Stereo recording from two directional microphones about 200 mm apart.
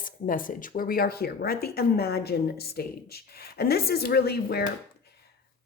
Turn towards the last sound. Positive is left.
turn(degrees=55)  # may be behind; listen again after turning